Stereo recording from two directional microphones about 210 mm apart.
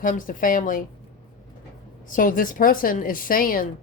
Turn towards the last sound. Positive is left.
turn(degrees=40)  # may be behind; listen again after turning